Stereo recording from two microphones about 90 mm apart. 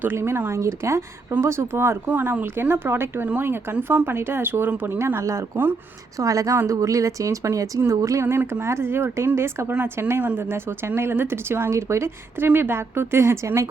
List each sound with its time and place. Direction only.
0.0 s speech: 25° right (ahead or behind)
2.0 s speech: 15° right (ahead or behind); by 13.7 s 35° right (ahead or behind)